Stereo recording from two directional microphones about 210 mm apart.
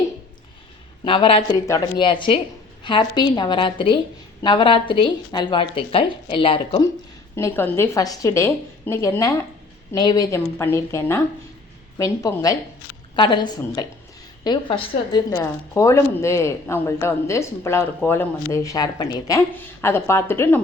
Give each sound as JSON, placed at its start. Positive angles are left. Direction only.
{"t": 1.0, "sound": "a woman's voice", "side_deg": 25}
{"t": 7.3, "sound": "a woman's voice", "side_deg": 10}